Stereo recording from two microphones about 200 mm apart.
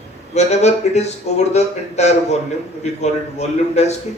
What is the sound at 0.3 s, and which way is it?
Speech, 35° left (ahead or behind).